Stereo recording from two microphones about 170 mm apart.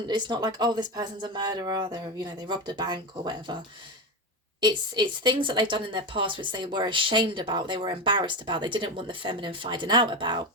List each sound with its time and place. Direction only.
0.1 s a woman's voice: 25° right (ahead or behind)
4.6 s a woman's voice: 25° right (ahead or behind)